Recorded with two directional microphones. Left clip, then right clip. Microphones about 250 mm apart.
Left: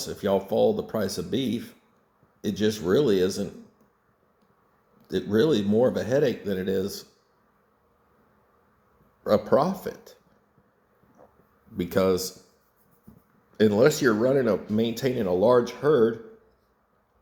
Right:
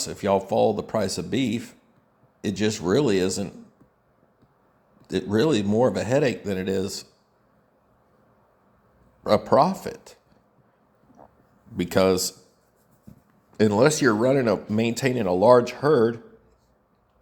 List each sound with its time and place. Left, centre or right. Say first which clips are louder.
0.0 s speech: right 2 dB; right
5.0 s speech: even; right
9.2 s speech: right 3 dB; right
11.8 s speech: right 3 dB; right
13.5 s speech: right 1 dB; right